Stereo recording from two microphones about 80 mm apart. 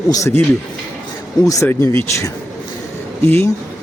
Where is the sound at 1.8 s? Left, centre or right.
Left.